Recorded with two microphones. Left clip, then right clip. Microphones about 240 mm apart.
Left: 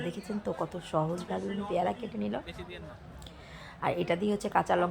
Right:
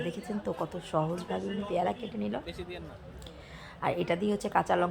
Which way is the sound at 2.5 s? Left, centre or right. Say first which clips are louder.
Right 3 dB; left.